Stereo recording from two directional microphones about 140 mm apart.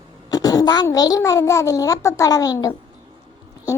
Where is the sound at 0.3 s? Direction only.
25° left (ahead or behind).